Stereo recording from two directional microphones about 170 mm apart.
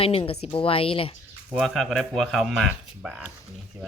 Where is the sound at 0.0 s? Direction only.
35° left (ahead or behind).